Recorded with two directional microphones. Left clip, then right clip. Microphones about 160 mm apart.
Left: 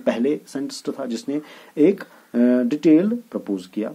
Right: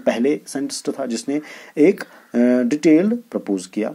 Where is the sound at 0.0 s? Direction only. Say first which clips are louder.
Right 3 dB; 10° right (ahead or behind).